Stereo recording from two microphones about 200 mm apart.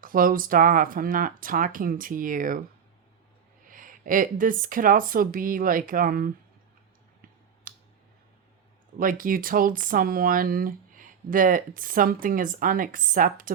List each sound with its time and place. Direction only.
0.0 s speech: 45° right (ahead or behind)
3.7 s speech: 45° right (ahead or behind)
7.7 s a sound: 45° right (ahead or behind)
9.0 s speech: 45° right (ahead or behind)